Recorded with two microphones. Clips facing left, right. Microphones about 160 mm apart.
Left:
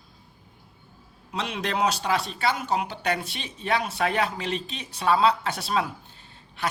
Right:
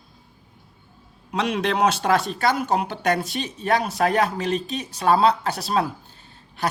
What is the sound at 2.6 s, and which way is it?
Speech, 45° right (ahead or behind).